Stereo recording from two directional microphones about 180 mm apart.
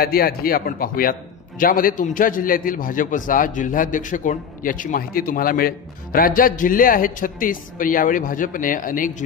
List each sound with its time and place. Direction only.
0.0 s a man's voice: 55° left (ahead or behind)